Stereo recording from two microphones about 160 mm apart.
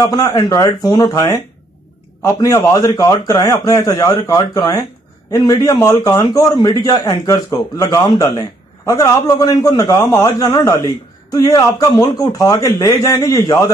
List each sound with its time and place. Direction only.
0.0 s a man's voice: 25° left (ahead or behind)